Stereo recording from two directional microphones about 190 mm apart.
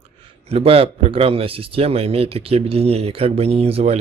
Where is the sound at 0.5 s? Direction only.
30° right (ahead or behind).